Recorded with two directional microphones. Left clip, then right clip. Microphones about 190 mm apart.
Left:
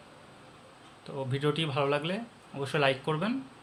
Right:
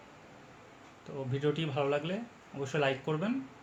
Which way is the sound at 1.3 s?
20° left (ahead or behind).